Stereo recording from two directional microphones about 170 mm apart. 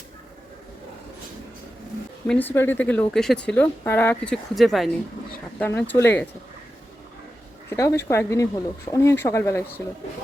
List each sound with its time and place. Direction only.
2.2 s speech: 10° left (ahead or behind)
7.7 s speech: 15° left (ahead or behind)